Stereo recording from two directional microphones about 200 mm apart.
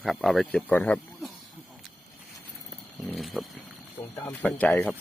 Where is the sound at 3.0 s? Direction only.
Centre (ahead or behind).